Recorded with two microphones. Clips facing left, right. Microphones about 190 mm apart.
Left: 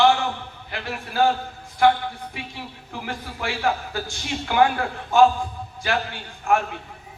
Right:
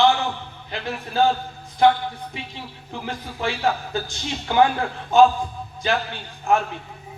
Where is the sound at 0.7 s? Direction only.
20° right (ahead or behind).